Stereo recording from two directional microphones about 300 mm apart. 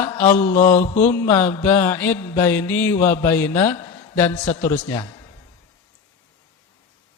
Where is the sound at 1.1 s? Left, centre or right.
Centre.